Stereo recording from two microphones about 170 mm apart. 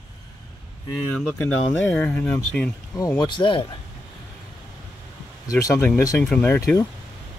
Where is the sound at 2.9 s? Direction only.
20° left (ahead or behind).